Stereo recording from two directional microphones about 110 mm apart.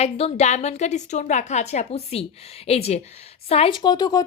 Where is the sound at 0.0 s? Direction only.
70° left (ahead or behind).